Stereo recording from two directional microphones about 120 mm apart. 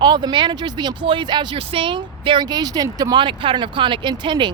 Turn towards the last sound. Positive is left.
turn(degrees=-40)  # may be behind; listen again after turning